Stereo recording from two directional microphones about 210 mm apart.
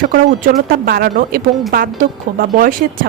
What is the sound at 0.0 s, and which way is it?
Speech, 40° right (ahead or behind).